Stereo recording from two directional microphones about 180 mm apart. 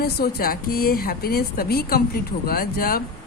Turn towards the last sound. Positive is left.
turn(degrees=55)  # may be behind; listen again after turning